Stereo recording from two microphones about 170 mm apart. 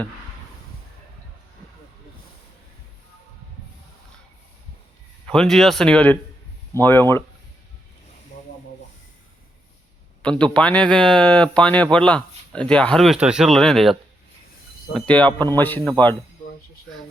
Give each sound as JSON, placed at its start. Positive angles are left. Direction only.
{"t": 5.2, "sound": "speech", "side_deg": 5}
{"t": 10.2, "sound": "speech", "side_deg": 5}
{"t": 14.9, "sound": "speech", "side_deg": 5}